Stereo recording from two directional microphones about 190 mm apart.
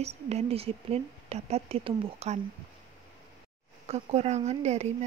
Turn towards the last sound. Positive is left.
turn(degrees=-35)  # may be behind; listen again after turning